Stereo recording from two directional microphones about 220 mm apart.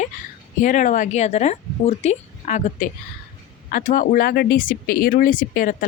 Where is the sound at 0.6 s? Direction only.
35° left (ahead or behind).